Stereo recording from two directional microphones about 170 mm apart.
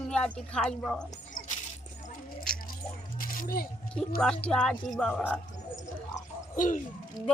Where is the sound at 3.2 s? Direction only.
60° left (ahead or behind).